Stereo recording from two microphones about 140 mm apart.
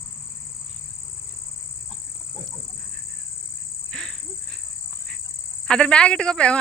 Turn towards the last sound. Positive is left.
turn(degrees=5)  # may be behind; listen again after turning